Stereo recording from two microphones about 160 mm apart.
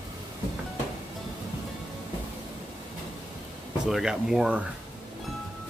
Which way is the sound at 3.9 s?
Centre (ahead or behind).